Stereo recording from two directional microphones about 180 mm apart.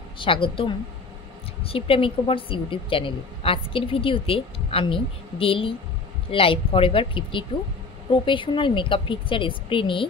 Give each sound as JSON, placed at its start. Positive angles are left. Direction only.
{"t": 0.2, "sound": "a woman's voice", "side_deg": 30}